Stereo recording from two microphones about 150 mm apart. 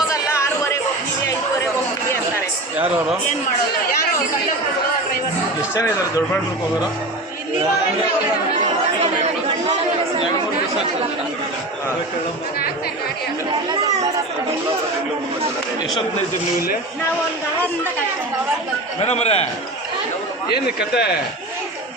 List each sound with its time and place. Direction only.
0.1 s a sound: 20° left (ahead or behind)
5.7 s speech: 20° left (ahead or behind)
18.9 s a man's voice: 45° left (ahead or behind)
20.9 s speech: 90° left